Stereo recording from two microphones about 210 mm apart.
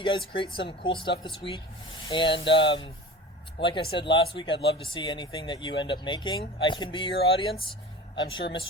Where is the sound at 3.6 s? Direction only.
25° left (ahead or behind).